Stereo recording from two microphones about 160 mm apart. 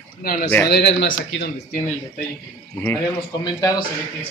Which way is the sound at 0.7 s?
85° left.